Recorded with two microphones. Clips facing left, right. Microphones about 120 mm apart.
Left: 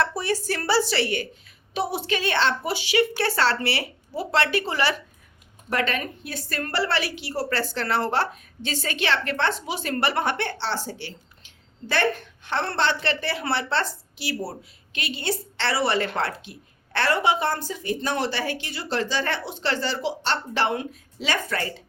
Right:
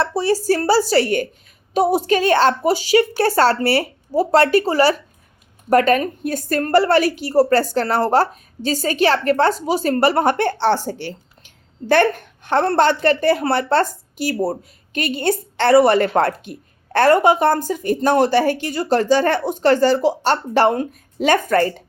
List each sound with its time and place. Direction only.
0.0 s a woman's voice: 30° right (ahead or behind); by 21.8 s 50° right (ahead or behind)